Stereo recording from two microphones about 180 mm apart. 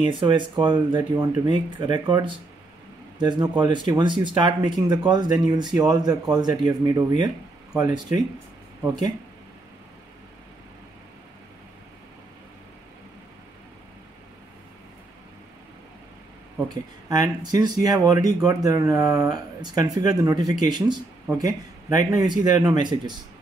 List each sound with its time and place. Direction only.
0.0 s speech: 25° right (ahead or behind)
16.5 s speech: 20° right (ahead or behind)